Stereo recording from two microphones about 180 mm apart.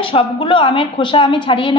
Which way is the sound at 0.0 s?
30° left (ahead or behind).